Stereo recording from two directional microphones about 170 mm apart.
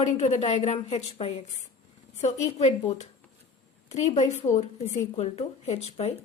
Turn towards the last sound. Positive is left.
turn(degrees=35)  # may be behind; listen again after turning